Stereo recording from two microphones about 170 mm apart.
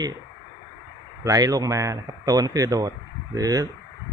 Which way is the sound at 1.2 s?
20° right (ahead or behind).